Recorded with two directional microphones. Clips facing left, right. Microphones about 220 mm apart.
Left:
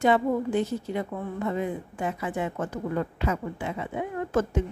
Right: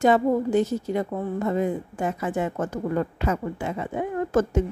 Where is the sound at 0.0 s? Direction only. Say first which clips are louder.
Right 3 dB; 40° right (ahead or behind).